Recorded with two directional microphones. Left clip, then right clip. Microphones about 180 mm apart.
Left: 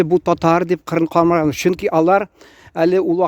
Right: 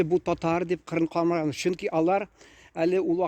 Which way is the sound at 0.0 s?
45° left (ahead or behind).